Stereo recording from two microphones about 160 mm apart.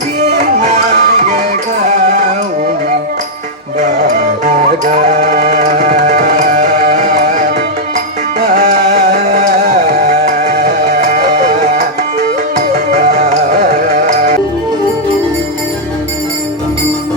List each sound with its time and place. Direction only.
0.5 s music: 45° right (ahead or behind)
4.0 s music: 45° right (ahead or behind)
9.1 s music: 45° right (ahead or behind)
13.1 s music: 45° right (ahead or behind)